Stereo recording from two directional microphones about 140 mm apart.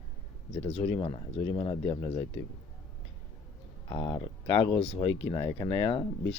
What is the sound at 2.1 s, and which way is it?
Speech, 45° left (ahead or behind).